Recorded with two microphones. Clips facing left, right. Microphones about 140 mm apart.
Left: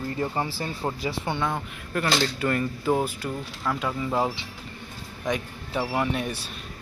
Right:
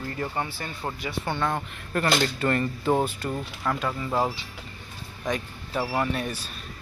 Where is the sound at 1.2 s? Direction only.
20° left (ahead or behind).